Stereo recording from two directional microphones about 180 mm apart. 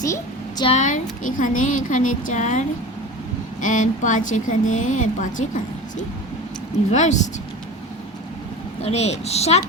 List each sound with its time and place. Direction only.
0.0 s a sound: 20° left (ahead or behind)
0.7 s a woman's voice: 45° left (ahead or behind)
8.8 s a woman's voice: 35° left (ahead or behind)